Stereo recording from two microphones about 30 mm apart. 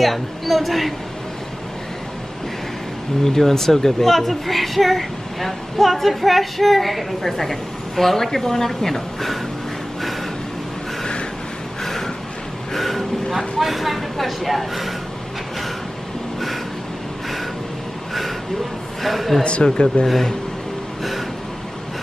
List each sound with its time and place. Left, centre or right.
0.0 s speech: centre
3.3 s a woman's voice: centre
11.8 s a sound: centre
12.7 s speech: centre
19.0 s speech: centre
19.4 s speech: left